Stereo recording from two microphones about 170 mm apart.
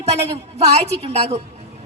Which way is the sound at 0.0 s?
40° right (ahead or behind).